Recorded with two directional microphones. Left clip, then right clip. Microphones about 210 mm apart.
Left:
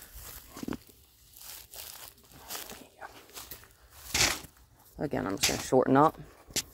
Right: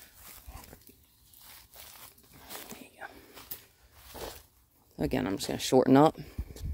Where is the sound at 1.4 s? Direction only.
50° left (ahead or behind).